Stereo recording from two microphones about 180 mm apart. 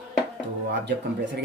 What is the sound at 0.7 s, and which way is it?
Speech, 70° right (ahead or behind).